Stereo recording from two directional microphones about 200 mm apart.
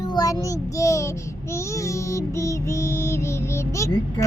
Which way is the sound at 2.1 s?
15° left (ahead or behind).